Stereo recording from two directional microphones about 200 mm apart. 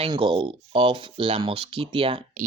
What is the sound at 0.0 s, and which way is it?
Speech, 25° right (ahead or behind).